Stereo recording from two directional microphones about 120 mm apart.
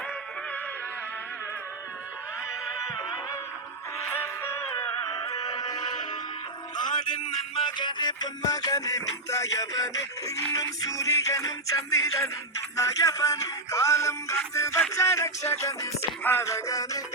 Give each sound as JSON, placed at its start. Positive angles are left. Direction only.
{"t": 2.5, "sound": "cat", "side_deg": -5}
{"t": 4.1, "sound": "music", "side_deg": 20}
{"t": 7.5, "sound": "music", "side_deg": 40}